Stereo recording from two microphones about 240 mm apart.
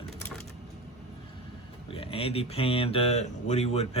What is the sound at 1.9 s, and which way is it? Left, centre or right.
Speech, left.